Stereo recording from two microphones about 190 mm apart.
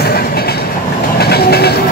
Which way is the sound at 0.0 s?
55° left (ahead or behind).